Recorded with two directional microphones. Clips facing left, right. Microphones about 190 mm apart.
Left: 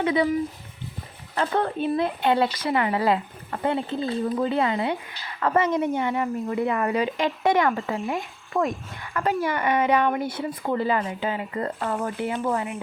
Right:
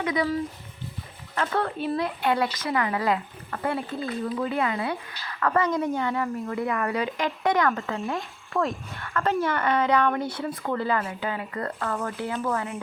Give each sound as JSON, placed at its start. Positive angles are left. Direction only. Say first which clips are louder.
{"t": 0.0, "sound": "speech", "louder": "left 4 dB", "side_deg": 30}
{"t": 1.5, "sound": "speech", "louder": "left 3 dB", "side_deg": 20}
{"t": 8.5, "sound": "speech", "louder": "left 2 dB", "side_deg": 10}